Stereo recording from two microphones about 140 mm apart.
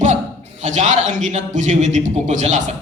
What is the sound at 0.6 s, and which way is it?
Speech, 60° right (ahead or behind).